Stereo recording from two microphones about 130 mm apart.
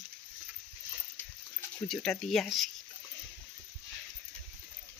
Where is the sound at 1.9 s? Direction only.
Centre (ahead or behind).